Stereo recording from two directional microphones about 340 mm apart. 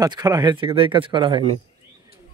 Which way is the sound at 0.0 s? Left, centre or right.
Centre.